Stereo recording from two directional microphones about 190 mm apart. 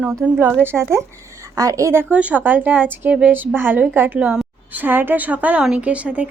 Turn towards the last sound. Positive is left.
turn(degrees=-5)  # may be behind; listen again after turning